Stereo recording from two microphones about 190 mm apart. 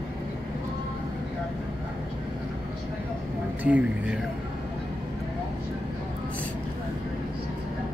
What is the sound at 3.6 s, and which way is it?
Speech, 5° right (ahead or behind).